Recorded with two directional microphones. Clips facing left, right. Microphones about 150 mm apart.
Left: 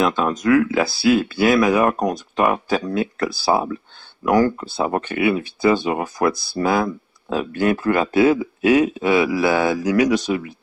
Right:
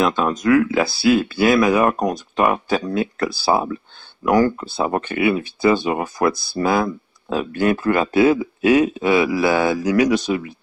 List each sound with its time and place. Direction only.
0.0 s speech: 25° right (ahead or behind)